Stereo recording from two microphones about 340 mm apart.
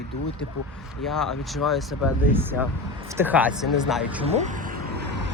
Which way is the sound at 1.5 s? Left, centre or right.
Centre.